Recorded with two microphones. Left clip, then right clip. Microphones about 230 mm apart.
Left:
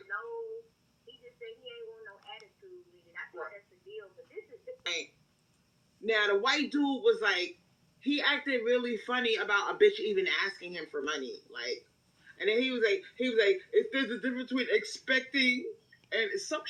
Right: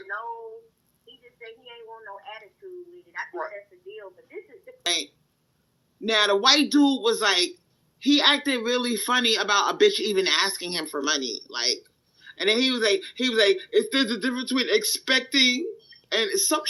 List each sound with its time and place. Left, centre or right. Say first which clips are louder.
1.4 s a sound: right 3 dB; right
2.3 s radio: right 6 dB; right
3.1 s telephone: right 9 dB; right
6.1 s speech: right 8 dB; right